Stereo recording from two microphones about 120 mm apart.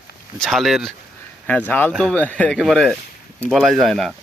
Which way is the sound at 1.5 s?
15° left (ahead or behind).